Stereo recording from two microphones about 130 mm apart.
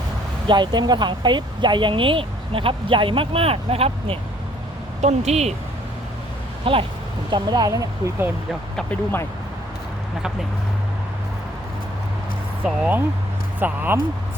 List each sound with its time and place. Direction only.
0.4 s speech: 35° right (ahead or behind); by 5.5 s 55° right (ahead or behind)
6.7 s speech: 45° right (ahead or behind)
7.3 s speech: 35° right (ahead or behind)
8.7 s speech: 10° left (ahead or behind)
12.6 s speech: 5° right (ahead or behind)